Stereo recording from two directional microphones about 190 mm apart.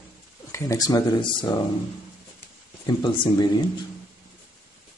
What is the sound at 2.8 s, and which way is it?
Speech, 25° left (ahead or behind).